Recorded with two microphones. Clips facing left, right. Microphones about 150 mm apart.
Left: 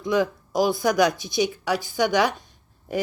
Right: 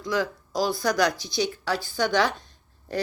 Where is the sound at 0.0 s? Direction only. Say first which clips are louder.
Left 4 dB; 20° left (ahead or behind).